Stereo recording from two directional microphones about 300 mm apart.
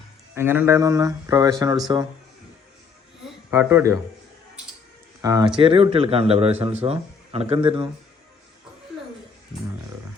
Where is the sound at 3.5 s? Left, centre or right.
Centre.